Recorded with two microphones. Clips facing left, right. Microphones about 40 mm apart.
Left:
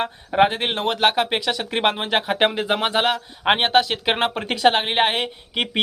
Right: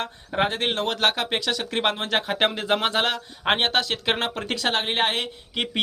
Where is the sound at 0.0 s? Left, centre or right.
Centre.